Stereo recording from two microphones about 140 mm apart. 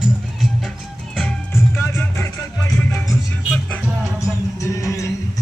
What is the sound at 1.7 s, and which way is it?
Music, 15° left (ahead or behind).